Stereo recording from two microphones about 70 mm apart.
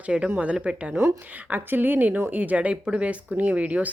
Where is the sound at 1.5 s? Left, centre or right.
Right.